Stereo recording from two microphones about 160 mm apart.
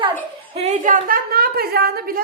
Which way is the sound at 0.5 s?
45° right (ahead or behind).